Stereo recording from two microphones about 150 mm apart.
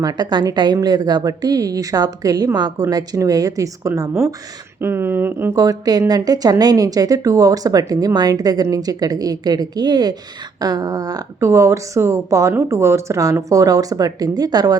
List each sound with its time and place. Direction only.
0.0 s a woman's voice: 25° right (ahead or behind)